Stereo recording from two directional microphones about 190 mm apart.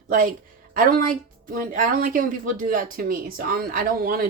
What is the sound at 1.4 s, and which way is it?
Speech, 45° right (ahead or behind).